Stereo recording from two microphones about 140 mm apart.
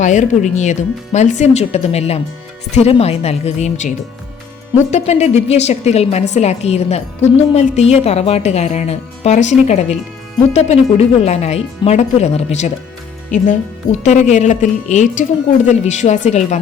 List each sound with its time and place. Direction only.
0.0 s a woman's voice: 60° left (ahead or behind)
14.0 s a woman's voice: 55° left (ahead or behind)